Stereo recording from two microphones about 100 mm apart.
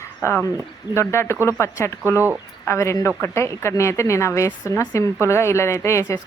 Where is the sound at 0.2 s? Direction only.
30° left (ahead or behind).